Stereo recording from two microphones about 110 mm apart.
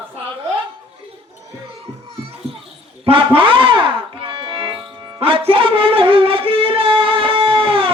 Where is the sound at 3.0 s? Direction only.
55° right (ahead or behind).